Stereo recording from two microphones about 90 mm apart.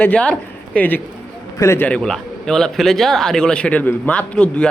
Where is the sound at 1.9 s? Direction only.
10° left (ahead or behind).